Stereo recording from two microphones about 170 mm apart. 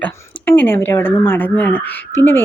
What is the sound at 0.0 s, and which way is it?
Speech, 10° left (ahead or behind).